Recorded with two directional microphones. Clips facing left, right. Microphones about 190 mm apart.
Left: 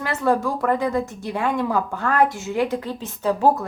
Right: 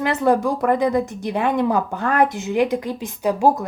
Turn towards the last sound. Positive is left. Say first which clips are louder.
# right 1 dB
turn(degrees=-15)  # may be behind; listen again after turning